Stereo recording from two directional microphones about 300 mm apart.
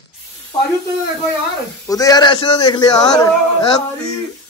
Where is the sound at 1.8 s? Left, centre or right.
Centre.